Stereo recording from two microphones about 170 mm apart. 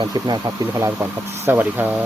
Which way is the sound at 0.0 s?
25° right (ahead or behind).